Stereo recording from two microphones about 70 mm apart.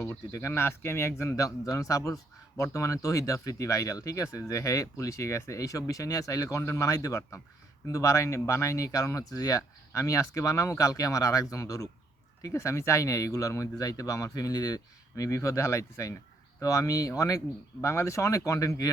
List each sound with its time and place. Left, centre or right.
0.3 s speech: left
1.4 s a man's voice: left